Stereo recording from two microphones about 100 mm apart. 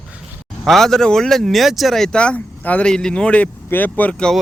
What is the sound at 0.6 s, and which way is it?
Speech, 5° left (ahead or behind).